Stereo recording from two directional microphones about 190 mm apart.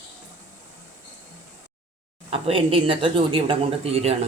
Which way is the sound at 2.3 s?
30° right (ahead or behind).